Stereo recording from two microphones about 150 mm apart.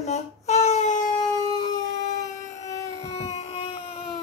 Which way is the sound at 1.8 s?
55° left (ahead or behind).